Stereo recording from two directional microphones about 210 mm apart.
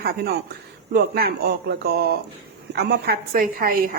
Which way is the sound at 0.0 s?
50° right (ahead or behind).